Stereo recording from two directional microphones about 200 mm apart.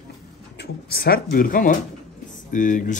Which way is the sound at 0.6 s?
50° left (ahead or behind).